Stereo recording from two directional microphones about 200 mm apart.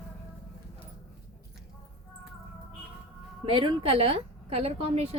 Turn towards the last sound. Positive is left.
turn(degrees=-30)  # may be behind; listen again after turning